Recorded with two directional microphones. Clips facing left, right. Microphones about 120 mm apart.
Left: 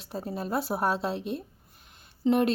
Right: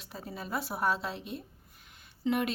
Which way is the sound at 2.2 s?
35° left (ahead or behind).